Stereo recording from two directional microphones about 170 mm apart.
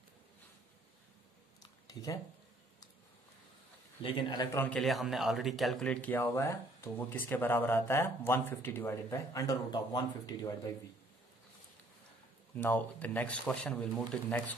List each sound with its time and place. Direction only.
1.6 s a sound: 20° left (ahead or behind)
4.0 s speech: 30° left (ahead or behind)
4.6 s a man's voice: 5° left (ahead or behind); by 10.7 s 20° left (ahead or behind)
12.5 s a man's voice: 10° left (ahead or behind)